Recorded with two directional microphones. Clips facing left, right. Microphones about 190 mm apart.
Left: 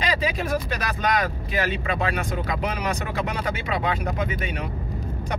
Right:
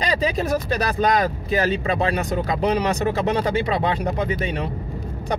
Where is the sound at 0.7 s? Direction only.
35° right (ahead or behind).